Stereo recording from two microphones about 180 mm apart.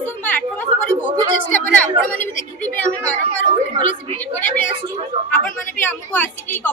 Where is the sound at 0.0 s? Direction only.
10° left (ahead or behind).